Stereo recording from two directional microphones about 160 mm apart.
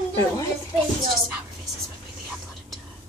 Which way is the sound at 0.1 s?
20° left (ahead or behind).